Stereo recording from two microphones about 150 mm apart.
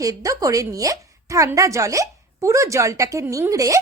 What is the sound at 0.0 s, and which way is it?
Speech, 20° right (ahead or behind).